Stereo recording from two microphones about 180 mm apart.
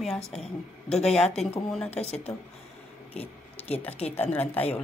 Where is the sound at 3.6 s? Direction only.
10° left (ahead or behind).